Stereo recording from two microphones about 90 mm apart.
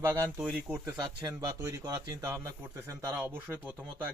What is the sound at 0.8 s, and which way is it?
Speech, 35° right (ahead or behind).